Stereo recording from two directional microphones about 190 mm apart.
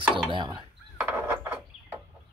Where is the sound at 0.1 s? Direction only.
25° right (ahead or behind).